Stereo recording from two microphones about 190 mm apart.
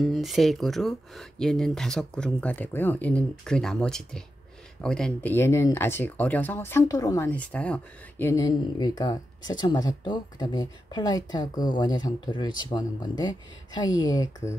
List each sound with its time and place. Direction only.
0.0 s speech: centre (ahead or behind); by 14.5 s 20° left (ahead or behind)